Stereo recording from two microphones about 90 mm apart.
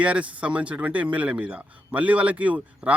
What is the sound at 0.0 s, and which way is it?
Speech, 15° right (ahead or behind).